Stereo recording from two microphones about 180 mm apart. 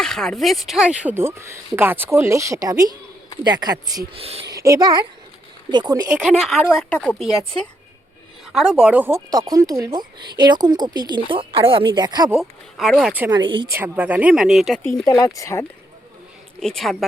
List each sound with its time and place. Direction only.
0.0 s speech: 5° left (ahead or behind); by 4.4 s 35° right (ahead or behind)
4.5 s speech: 20° right (ahead or behind)
6.1 s speech: centre (ahead or behind)
8.5 s speech: 5° right (ahead or behind); by 12.3 s 25° right (ahead or behind)
12.4 s speech: centre (ahead or behind)
13.3 s speech: 25° right (ahead or behind)
13.7 s speech: 10° right (ahead or behind)
15.0 s speech: 20° left (ahead or behind)
16.6 s speech: centre (ahead or behind)